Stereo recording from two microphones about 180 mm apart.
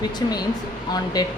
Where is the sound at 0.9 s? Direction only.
20° left (ahead or behind).